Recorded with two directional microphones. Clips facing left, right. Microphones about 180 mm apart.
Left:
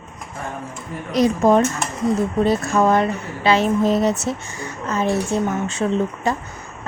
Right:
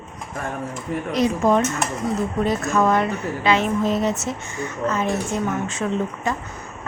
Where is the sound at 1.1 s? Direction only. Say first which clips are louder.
Left 4 dB; 40° left (ahead or behind).